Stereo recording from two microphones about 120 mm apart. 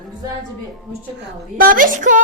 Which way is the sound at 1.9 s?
90° right.